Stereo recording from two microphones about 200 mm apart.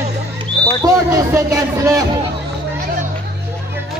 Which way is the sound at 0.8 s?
15° right (ahead or behind).